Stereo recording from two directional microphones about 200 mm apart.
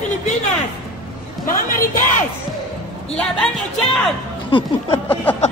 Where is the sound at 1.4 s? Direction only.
45° left (ahead or behind).